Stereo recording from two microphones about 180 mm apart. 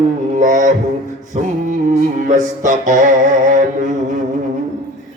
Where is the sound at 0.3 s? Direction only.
45° right (ahead or behind).